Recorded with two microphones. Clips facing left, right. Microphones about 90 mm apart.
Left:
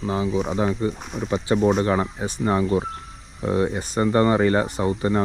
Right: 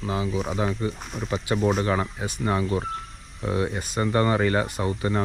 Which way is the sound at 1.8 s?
45° left (ahead or behind).